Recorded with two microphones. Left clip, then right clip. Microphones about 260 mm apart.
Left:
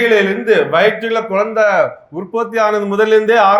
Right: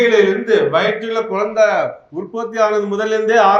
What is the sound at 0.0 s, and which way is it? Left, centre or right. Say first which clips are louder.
A man's voice: even; left.